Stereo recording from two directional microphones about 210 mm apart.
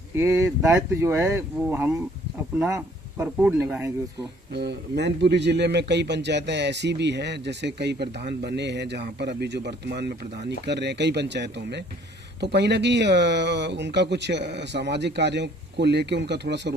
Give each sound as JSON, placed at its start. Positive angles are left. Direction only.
{"t": 0.1, "sound": "speech", "side_deg": -15}
{"t": 4.5, "sound": "a man's voice", "side_deg": -50}